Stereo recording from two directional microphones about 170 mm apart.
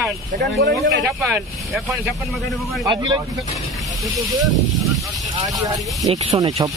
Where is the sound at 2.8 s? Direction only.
25° right (ahead or behind).